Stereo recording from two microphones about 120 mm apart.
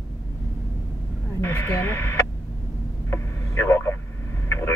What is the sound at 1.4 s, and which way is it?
Speech, 20° left (ahead or behind).